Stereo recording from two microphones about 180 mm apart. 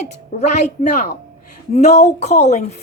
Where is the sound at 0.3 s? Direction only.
40° left (ahead or behind).